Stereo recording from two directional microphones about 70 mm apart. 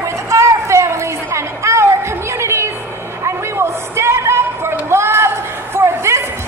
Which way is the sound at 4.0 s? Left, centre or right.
Right.